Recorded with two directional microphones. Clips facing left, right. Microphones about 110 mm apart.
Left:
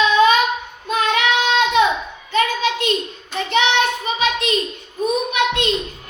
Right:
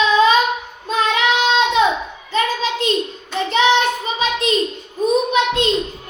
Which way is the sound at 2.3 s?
30° right (ahead or behind).